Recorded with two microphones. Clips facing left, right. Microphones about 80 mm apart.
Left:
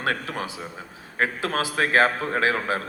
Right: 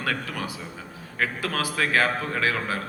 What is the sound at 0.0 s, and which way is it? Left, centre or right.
A man's voice, left.